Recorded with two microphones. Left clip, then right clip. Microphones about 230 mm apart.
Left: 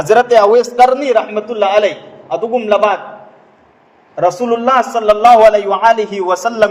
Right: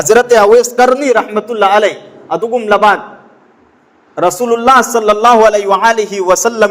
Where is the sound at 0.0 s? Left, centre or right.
Right.